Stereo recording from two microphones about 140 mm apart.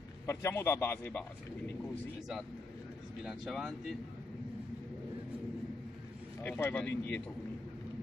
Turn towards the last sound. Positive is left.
turn(degrees=15)  # may be behind; listen again after turning